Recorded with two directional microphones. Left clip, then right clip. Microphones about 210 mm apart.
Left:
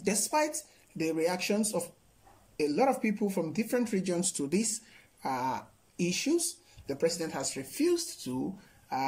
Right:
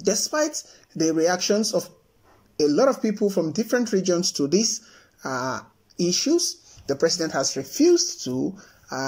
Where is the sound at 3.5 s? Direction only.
20° left (ahead or behind).